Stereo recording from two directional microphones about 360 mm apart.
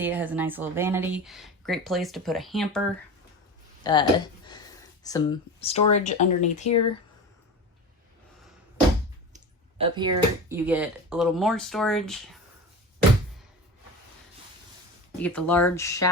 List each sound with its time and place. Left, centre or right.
0.0 s speech: centre
3.9 s speech: centre
5.0 s speech: centre
9.3 s speech: centre
15.2 s speech: centre